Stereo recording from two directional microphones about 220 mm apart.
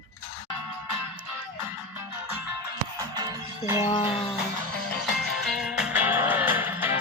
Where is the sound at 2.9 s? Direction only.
15° right (ahead or behind).